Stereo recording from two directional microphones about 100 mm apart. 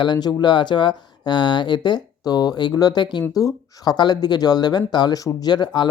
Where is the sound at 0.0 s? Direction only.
45° left (ahead or behind).